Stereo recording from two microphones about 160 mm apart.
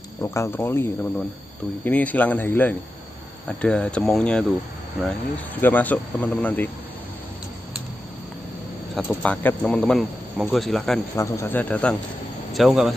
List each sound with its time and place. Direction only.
0.2 s speech: 15° left (ahead or behind)
8.9 s speech: 10° left (ahead or behind)
11.1 s speech: 20° left (ahead or behind); by 12.9 s centre (ahead or behind)